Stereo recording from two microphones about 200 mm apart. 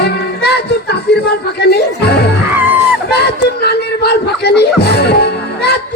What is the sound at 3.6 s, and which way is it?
Music, 55° left (ahead or behind).